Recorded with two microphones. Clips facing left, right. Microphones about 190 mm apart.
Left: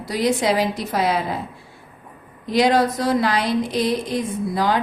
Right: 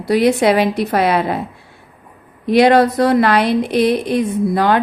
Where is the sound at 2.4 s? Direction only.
65° right (ahead or behind).